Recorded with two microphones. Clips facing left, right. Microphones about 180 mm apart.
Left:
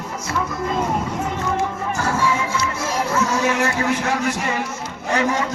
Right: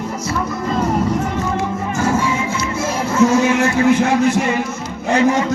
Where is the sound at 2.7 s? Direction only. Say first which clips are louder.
Right 7 dB; 25° right (ahead or behind).